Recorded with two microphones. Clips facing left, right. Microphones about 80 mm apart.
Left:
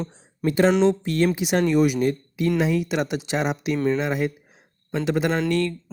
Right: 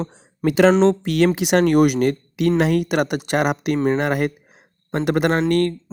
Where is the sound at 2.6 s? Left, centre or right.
Right.